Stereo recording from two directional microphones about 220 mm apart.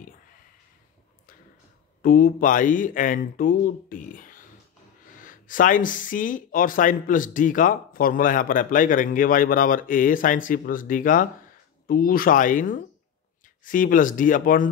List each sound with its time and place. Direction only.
2.0 s speech: 40° left (ahead or behind)